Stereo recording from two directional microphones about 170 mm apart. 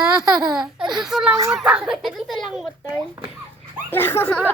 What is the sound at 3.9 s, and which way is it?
Speech, 15° left (ahead or behind).